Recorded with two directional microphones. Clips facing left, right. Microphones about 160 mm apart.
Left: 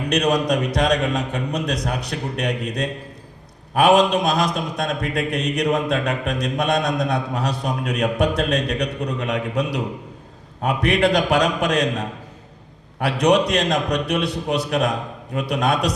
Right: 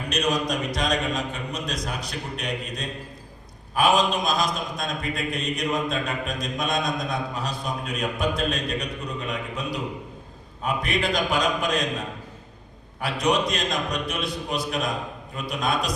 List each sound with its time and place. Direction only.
0.1 s a man's voice: 65° left (ahead or behind)